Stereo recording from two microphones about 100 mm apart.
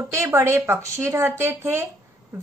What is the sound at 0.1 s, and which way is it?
Speech, 25° right (ahead or behind).